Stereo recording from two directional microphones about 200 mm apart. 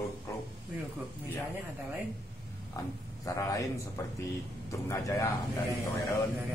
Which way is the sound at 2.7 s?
15° left (ahead or behind).